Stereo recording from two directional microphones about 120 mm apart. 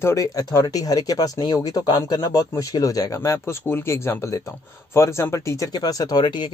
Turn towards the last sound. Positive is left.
turn(degrees=35)  # may be behind; listen again after turning